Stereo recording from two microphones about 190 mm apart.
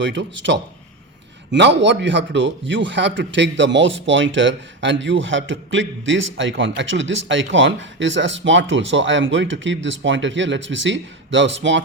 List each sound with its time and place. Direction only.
0.0 s a man's voice: 70° right (ahead or behind)